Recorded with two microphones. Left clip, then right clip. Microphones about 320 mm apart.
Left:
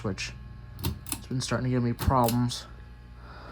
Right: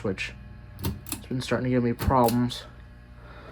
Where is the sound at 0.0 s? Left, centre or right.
Centre.